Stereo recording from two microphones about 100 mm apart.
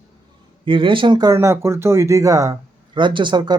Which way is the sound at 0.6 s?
55° right (ahead or behind).